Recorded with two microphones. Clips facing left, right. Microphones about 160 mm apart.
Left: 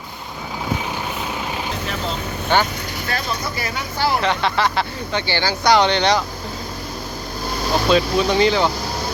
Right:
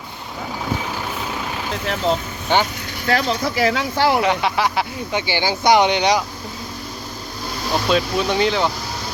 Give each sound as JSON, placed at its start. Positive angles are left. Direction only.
{"t": 2.5, "sound": "speech", "side_deg": -15}
{"t": 3.1, "sound": "speech", "side_deg": -90}
{"t": 4.2, "sound": "speech", "side_deg": -10}
{"t": 7.9, "sound": "speech", "side_deg": 0}